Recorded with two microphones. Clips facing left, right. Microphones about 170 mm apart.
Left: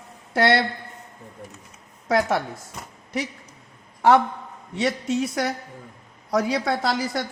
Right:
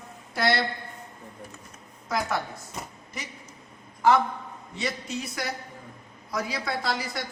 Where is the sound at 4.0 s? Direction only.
70° left (ahead or behind).